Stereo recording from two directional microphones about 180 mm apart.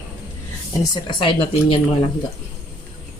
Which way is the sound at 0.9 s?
25° left (ahead or behind).